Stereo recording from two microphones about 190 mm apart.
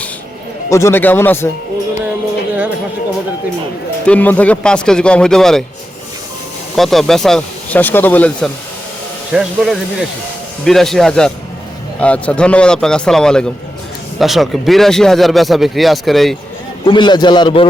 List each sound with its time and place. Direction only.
0.7 s speech: 15° left (ahead or behind)
4.0 s speech: 10° left (ahead or behind)
6.7 s speech: centre (ahead or behind)
9.3 s speech: 5° right (ahead or behind)
16.8 s a man's voice: 25° left (ahead or behind)